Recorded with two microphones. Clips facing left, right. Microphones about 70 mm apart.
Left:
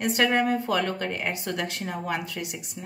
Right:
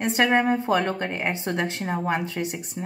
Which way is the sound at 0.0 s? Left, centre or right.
Right.